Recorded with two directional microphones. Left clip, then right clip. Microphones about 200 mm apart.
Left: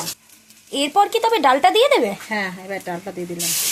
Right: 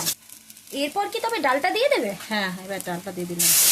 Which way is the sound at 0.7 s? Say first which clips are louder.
Left 9 dB; 25° left (ahead or behind).